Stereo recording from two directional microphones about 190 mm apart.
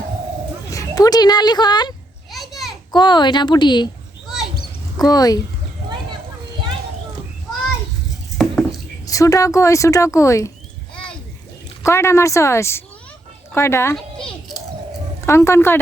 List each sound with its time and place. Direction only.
0.7 s speech: 20° left (ahead or behind)
2.3 s children playing: centre (ahead or behind)
2.9 s speech: 25° left (ahead or behind)
4.9 s speech: 20° left (ahead or behind)
8.4 s a sound: centre (ahead or behind)
9.0 s speech: 15° left (ahead or behind)
11.8 s speech: 15° left (ahead or behind)
13.9 s children playing: centre (ahead or behind)
15.3 s speech: 15° left (ahead or behind)